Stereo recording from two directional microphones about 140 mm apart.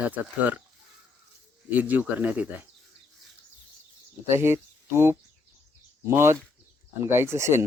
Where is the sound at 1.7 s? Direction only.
10° right (ahead or behind).